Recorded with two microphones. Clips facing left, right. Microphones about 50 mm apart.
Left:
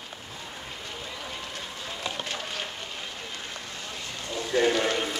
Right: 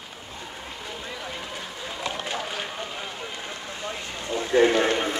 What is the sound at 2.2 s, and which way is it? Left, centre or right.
Vehicle, centre.